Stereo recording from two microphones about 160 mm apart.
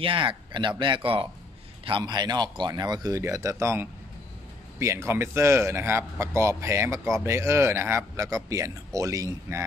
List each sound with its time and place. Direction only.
0.0 s a man's voice: 30° right (ahead or behind)